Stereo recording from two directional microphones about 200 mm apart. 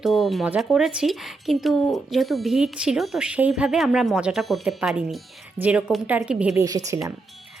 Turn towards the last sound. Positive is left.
turn(degrees=-15)  # may be behind; listen again after turning